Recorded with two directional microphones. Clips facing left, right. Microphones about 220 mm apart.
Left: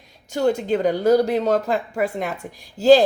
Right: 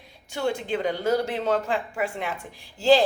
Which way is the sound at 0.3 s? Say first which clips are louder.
Left 7 dB; 40° left (ahead or behind).